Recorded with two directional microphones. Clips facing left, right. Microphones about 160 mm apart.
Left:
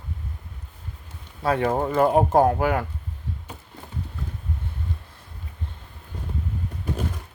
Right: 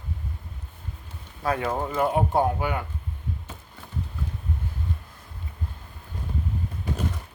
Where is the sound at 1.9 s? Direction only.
40° left (ahead or behind).